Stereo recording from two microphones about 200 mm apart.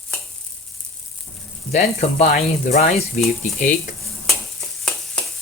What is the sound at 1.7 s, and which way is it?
Speech, 35° left (ahead or behind).